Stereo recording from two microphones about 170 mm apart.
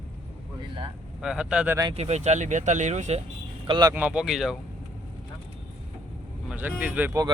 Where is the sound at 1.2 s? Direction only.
5° right (ahead or behind).